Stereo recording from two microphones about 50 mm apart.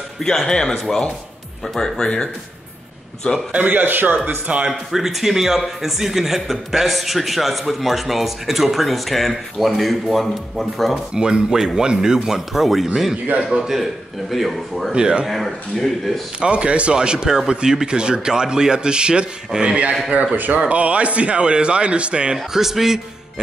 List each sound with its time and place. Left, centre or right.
0.2 s speech: centre
3.5 s a man's voice: right
3.8 s a man's voice: right
4.6 s a man's voice: centre
11.1 s a man's voice: centre
14.9 s a man's voice: centre
15.2 s a man's voice: centre
16.3 s a man's voice: right
20.3 s a man's voice: right
22.5 s speech: centre